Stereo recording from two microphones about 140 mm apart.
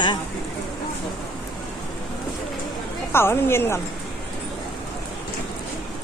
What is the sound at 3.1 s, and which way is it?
Speech, 15° left (ahead or behind).